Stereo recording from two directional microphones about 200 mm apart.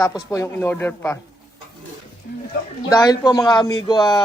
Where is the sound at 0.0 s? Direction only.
20° left (ahead or behind).